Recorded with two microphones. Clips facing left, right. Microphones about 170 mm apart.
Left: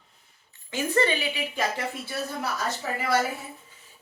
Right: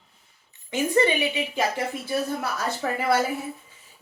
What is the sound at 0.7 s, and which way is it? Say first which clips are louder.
Speech: right 3 dB; 15° right (ahead or behind).